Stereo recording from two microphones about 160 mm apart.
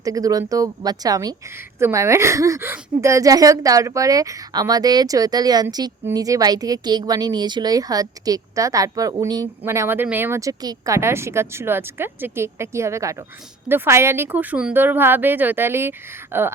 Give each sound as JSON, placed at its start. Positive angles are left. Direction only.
{"t": 0.0, "sound": "speech", "side_deg": -20}